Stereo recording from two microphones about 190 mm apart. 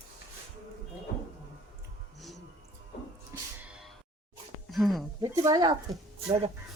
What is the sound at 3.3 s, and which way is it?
Music, 15° right (ahead or behind).